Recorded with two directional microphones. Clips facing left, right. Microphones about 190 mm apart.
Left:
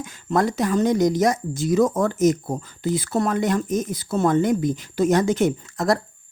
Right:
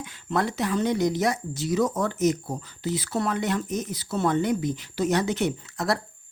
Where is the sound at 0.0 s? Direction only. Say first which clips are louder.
Left 5 dB; 45° left (ahead or behind).